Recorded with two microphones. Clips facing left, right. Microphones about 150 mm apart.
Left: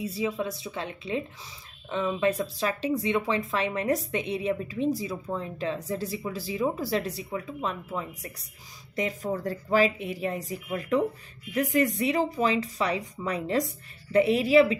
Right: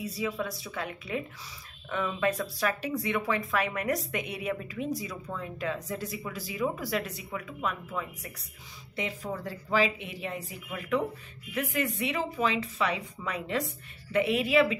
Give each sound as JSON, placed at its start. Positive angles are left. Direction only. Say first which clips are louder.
{"t": 0.0, "sound": "speech", "louder": "left 3 dB", "side_deg": 25}
{"t": 8.9, "sound": "speech", "louder": "left 5 dB", "side_deg": 45}